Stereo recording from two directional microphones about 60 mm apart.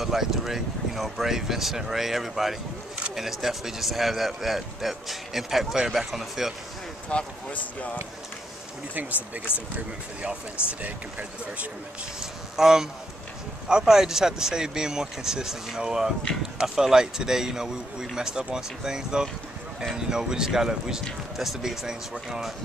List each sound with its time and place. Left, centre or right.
0.0 s speech: centre
7.1 s speech: centre
9.5 s speech: left
10.8 s speech: right
12.2 s speech: centre